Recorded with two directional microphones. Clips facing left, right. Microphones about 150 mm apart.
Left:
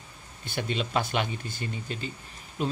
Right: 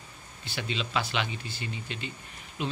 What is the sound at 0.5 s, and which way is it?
Speech, 50° left (ahead or behind).